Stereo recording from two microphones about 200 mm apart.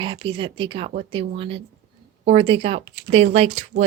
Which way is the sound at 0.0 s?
25° right (ahead or behind).